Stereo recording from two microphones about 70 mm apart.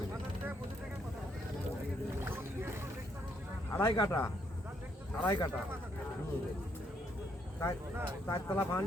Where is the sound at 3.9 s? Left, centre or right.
Left.